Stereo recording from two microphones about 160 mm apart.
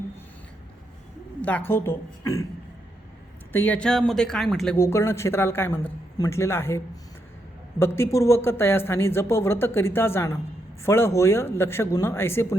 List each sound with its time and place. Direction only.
1.4 s speech: 10° left (ahead or behind)
3.5 s speech: 10° left (ahead or behind)
4.8 s speech: 15° left (ahead or behind)